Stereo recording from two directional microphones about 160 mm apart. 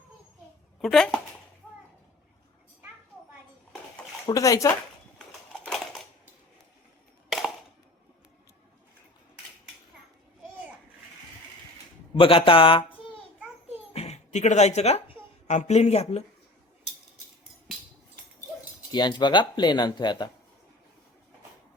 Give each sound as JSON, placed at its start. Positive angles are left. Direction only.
{"t": 0.8, "sound": "speech", "side_deg": 0}
{"t": 4.3, "sound": "speech", "side_deg": 20}
{"t": 5.6, "sound": "crushing", "side_deg": 5}
{"t": 7.3, "sound": "a sound", "side_deg": 0}
{"t": 12.1, "sound": "speech", "side_deg": 35}
{"t": 13.9, "sound": "speech", "side_deg": 40}
{"t": 18.9, "sound": "speech", "side_deg": 30}